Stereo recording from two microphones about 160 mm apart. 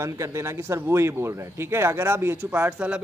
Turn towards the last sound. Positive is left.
turn(degrees=-10)  # may be behind; listen again after turning